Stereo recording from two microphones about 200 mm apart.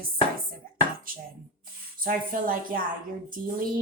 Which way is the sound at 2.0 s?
45° right (ahead or behind).